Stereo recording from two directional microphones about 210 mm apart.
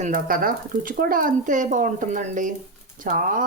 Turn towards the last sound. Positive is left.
turn(degrees=-40)  # may be behind; listen again after turning